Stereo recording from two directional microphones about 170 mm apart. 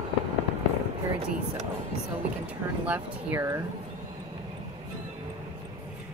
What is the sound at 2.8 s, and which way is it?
Speech, 10° right (ahead or behind).